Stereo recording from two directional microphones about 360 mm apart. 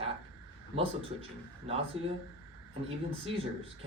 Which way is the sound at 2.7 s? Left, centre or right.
Centre.